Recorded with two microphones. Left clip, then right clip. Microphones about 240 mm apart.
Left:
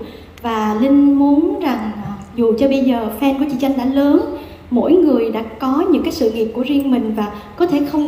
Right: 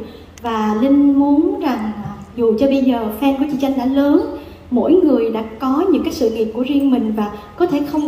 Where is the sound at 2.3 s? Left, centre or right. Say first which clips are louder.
Even; left.